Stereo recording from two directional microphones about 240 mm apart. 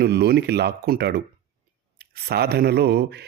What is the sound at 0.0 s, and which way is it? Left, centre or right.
Speech, right.